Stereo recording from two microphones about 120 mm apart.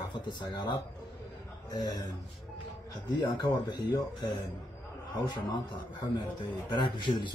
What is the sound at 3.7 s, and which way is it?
Speech, 35° left (ahead or behind).